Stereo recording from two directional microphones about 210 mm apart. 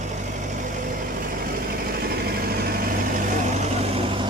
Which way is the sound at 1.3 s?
45° right (ahead or behind).